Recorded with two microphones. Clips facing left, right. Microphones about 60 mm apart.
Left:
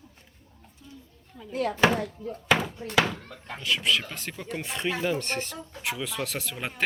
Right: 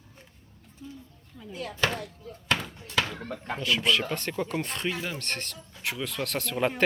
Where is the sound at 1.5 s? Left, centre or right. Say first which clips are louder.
Left 9 dB; left.